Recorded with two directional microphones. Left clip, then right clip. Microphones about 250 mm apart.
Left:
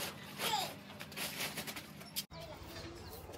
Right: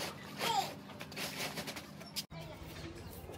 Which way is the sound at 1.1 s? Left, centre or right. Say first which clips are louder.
Right 1 dB; centre.